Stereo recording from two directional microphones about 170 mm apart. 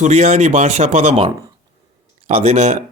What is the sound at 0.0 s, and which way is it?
A man's voice, 40° right (ahead or behind).